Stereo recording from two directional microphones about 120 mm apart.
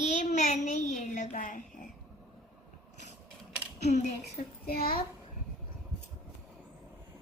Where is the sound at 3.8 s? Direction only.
70° left (ahead or behind).